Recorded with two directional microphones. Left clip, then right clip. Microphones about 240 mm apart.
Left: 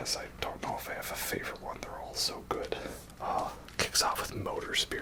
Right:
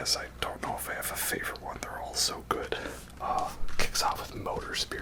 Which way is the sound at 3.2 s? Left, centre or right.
Centre.